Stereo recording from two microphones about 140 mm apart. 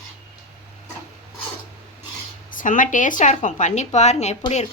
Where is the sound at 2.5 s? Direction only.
70° left (ahead or behind); by 4.4 s 55° left (ahead or behind).